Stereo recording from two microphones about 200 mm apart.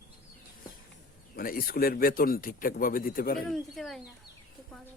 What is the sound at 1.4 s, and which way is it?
Speech, 45° left (ahead or behind).